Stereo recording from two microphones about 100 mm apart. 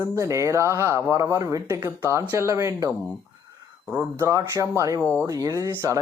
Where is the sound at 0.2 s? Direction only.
30° right (ahead or behind).